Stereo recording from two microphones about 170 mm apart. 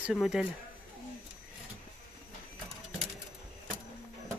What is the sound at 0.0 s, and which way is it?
Speech, centre (ahead or behind).